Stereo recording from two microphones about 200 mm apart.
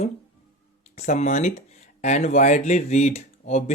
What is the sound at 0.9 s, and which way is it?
Speech, 35° left (ahead or behind).